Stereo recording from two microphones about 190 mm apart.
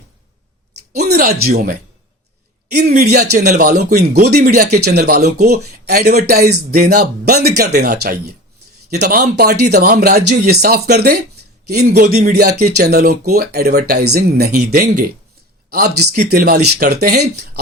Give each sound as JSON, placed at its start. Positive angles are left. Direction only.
{"t": 1.4, "sound": "speech", "side_deg": -50}
{"t": 2.9, "sound": "speech", "side_deg": -40}
{"t": 3.7, "sound": "a man's voice", "side_deg": -55}
{"t": 11.9, "sound": "speech", "side_deg": -40}
{"t": 12.3, "sound": "speech", "side_deg": -55}